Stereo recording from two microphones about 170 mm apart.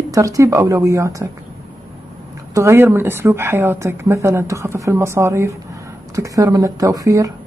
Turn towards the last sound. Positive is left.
turn(degrees=-20)  # may be behind; listen again after turning